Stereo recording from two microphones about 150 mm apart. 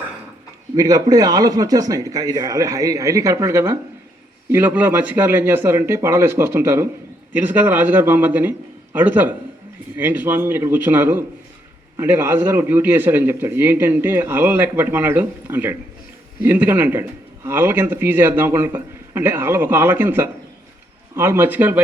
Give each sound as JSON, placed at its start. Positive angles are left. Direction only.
{"t": 0.8, "sound": "a man's voice", "side_deg": -25}